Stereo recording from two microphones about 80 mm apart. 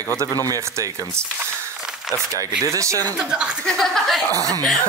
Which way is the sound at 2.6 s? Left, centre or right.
Right.